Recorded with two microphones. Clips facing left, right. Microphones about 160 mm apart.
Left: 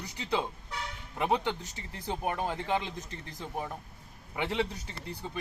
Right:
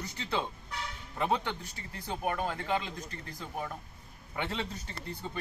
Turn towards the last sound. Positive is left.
turn(degrees=15)  # may be behind; listen again after turning